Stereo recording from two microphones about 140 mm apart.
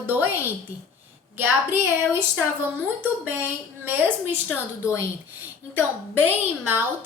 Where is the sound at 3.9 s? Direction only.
15° right (ahead or behind).